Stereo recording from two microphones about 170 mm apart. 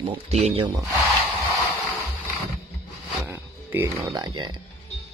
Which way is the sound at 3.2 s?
10° right (ahead or behind).